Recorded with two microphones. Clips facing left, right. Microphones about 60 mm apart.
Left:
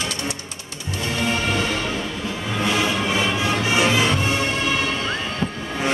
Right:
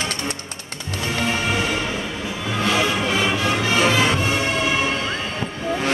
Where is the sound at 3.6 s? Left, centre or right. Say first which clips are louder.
Even; centre.